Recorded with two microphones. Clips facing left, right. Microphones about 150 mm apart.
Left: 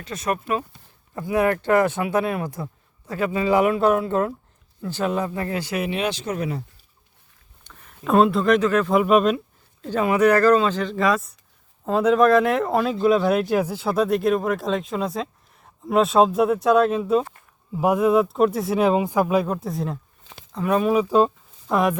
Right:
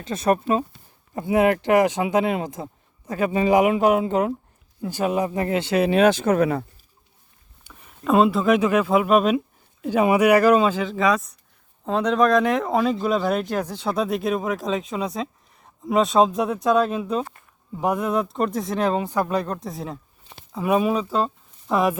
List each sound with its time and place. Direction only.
0.0 s speech: 30° right (ahead or behind)
6.0 s speech: 50° right (ahead or behind)
7.6 s speech: 5° right (ahead or behind)
20.9 s speech: 15° left (ahead or behind)
21.7 s speech: centre (ahead or behind)